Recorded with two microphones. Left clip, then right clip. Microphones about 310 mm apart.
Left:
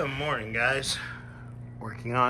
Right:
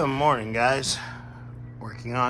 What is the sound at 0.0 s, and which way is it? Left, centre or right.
Speech, centre.